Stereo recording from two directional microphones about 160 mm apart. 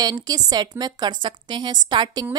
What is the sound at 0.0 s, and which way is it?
A woman's voice, 25° right (ahead or behind).